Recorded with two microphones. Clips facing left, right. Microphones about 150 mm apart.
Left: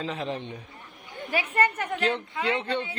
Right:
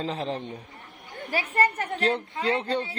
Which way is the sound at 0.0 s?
35° right (ahead or behind).